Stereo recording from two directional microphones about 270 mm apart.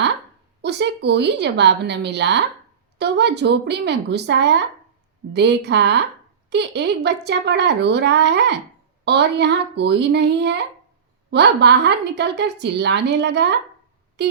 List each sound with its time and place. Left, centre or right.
0.6 s a woman's voice: right